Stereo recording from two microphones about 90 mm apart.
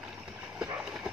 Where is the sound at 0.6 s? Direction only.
10° right (ahead or behind).